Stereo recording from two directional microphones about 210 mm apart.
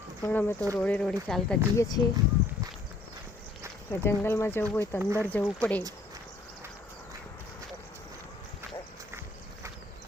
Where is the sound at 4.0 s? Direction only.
10° left (ahead or behind).